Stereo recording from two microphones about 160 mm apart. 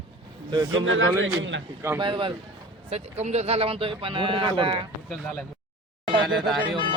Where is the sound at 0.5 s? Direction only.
25° right (ahead or behind).